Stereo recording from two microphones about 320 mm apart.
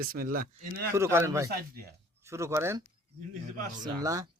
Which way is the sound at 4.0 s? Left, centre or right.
Centre.